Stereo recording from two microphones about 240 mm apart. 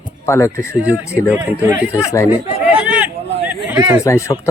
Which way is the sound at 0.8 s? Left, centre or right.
Centre.